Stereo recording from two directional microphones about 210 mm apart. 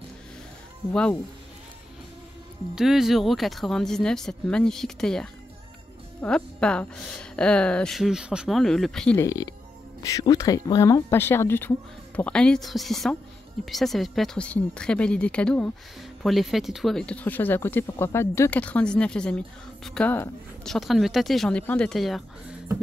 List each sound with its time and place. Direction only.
0.9 s speech: 5° left (ahead or behind)
2.7 s speech: centre (ahead or behind)
9.2 s speech: 15° left (ahead or behind); by 22.2 s centre (ahead or behind)